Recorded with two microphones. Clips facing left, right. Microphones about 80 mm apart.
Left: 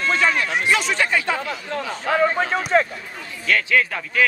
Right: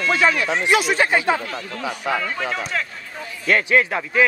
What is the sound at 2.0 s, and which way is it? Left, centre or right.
Speech, left.